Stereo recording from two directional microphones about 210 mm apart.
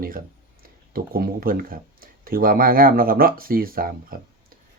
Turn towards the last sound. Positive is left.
turn(degrees=-40)  # may be behind; listen again after turning